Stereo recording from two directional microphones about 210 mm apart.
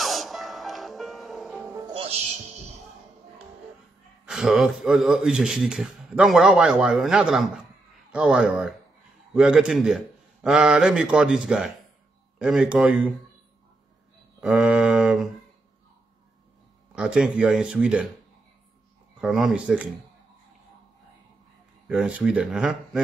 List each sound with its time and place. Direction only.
0.0 s music: centre (ahead or behind)
2.0 s music: 30° right (ahead or behind)
4.3 s a man's voice: centre (ahead or behind)
14.4 s a man's voice: 5° right (ahead or behind)
16.9 s a man's voice: 5° right (ahead or behind)
19.2 s a man's voice: centre (ahead or behind)
21.8 s a man's voice: 5° right (ahead or behind)